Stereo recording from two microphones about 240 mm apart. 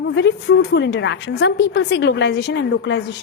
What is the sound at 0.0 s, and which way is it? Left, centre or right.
A woman's voice, left.